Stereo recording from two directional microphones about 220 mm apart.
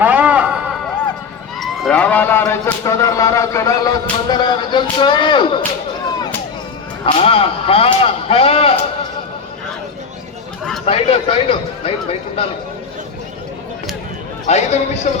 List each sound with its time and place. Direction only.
0.0 s a sound: 5° right (ahead or behind)
1.5 s a man's voice: centre (ahead or behind); by 5.5 s 20° left (ahead or behind)
7.0 s speech: 25° left (ahead or behind)
10.8 s speech: 25° left (ahead or behind)
14.4 s a man's voice: 30° left (ahead or behind)